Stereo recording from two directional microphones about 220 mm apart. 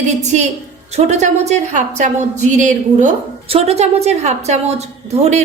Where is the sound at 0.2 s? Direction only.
30° right (ahead or behind).